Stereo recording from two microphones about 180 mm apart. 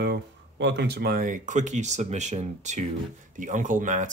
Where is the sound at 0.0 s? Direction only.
70° right (ahead or behind).